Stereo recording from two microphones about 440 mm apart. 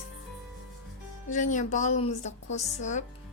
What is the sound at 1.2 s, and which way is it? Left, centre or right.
A woman's voice, centre.